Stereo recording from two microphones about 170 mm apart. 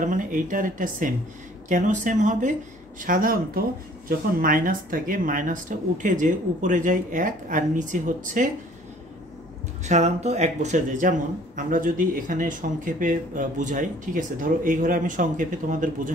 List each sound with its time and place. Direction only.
0.0 s a man's voice: 50° right (ahead or behind)
9.8 s a man's voice: 40° right (ahead or behind)